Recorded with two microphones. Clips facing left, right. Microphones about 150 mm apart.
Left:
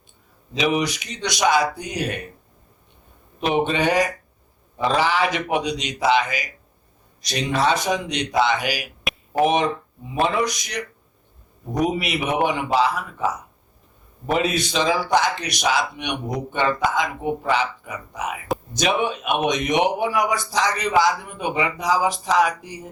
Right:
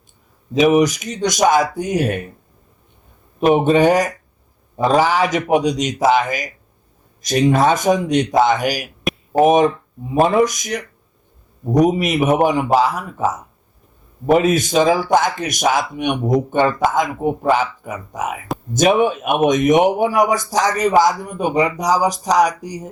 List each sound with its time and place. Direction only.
0.5 s speech: 45° right (ahead or behind)
3.4 s speech: 45° right (ahead or behind)